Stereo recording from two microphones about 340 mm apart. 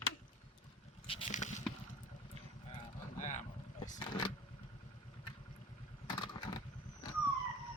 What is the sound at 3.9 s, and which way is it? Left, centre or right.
Vehicle, centre.